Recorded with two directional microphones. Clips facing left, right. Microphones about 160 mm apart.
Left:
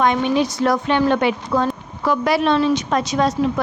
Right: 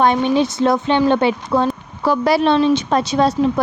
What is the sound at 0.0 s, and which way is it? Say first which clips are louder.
A woman's voice: right 2 dB; 30° right (ahead or behind).